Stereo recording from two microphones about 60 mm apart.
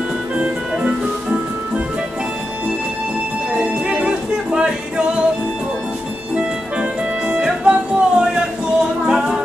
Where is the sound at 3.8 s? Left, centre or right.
Centre.